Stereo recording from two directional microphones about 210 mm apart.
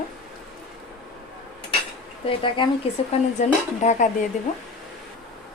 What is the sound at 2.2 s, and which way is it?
A woman's voice, 25° left (ahead or behind).